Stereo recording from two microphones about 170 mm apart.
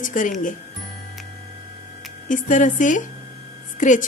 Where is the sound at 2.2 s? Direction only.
50° left (ahead or behind).